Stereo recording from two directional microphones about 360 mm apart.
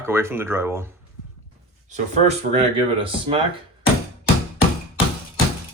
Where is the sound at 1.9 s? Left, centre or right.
Centre.